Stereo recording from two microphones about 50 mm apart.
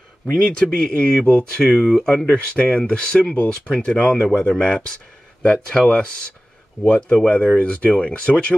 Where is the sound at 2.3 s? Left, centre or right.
Left.